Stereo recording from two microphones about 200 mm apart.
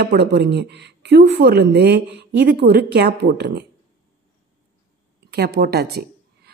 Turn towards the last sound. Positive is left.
turn(degrees=-50)  # may be behind; listen again after turning